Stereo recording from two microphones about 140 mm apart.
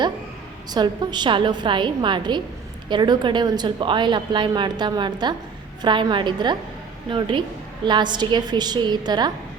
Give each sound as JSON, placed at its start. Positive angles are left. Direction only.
{"t": 0.7, "sound": "a woman's voice", "side_deg": -30}